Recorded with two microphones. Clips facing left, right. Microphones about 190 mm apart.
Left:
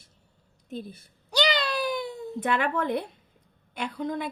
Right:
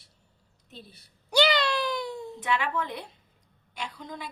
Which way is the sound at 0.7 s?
50° left (ahead or behind).